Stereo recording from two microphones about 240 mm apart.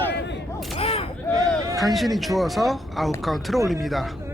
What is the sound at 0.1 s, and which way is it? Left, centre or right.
Single-lens reflex camera, left.